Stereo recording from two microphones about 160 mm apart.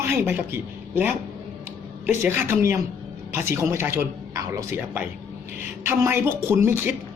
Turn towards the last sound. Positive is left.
turn(degrees=-15)  # may be behind; listen again after turning